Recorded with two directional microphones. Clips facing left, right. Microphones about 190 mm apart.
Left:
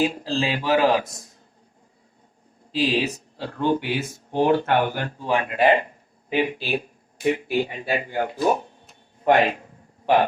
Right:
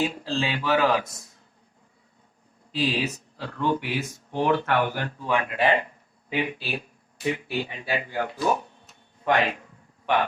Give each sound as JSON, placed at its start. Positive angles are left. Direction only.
{"t": 0.0, "sound": "speech", "side_deg": 35}
{"t": 2.7, "sound": "speech", "side_deg": 25}
{"t": 9.4, "sound": "a sound", "side_deg": 30}